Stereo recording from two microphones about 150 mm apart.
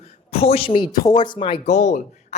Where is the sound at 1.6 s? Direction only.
55° left (ahead or behind).